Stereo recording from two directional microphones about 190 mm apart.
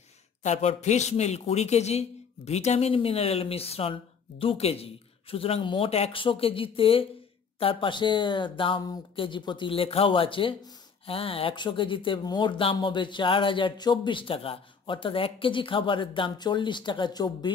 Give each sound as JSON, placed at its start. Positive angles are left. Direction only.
{"t": 0.4, "sound": "speech", "side_deg": 35}